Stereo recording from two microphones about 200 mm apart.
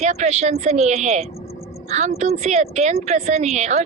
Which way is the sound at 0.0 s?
35° right (ahead or behind).